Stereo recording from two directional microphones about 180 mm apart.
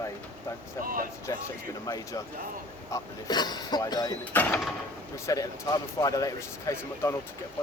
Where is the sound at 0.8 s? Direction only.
50° right (ahead or behind).